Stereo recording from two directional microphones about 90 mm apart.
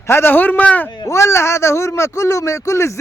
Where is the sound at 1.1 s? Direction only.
30° left (ahead or behind).